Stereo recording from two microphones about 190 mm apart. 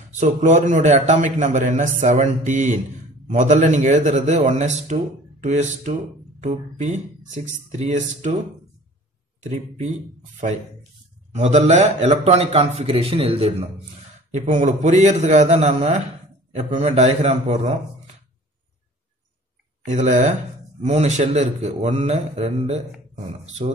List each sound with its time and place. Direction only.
0.2 s a man's voice: 40° right (ahead or behind)
9.4 s a man's voice: 40° right (ahead or behind)
14.3 s a man's voice: 40° right (ahead or behind)
19.8 s a man's voice: 40° right (ahead or behind)